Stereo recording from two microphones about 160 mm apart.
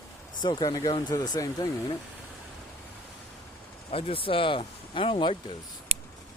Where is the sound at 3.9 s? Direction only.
35° left (ahead or behind).